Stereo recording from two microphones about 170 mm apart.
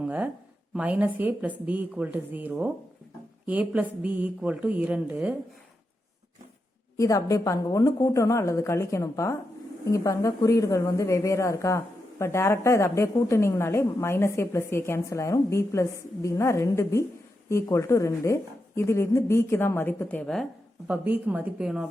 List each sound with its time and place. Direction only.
0.0 s a woman's voice: 10° right (ahead or behind)
6.9 s a woman's voice: 20° left (ahead or behind); by 20.5 s 5° left (ahead or behind)
20.8 s a woman's voice: 10° right (ahead or behind)